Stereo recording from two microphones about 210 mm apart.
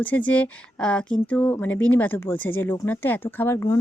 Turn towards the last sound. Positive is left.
turn(degrees=15)  # may be behind; listen again after turning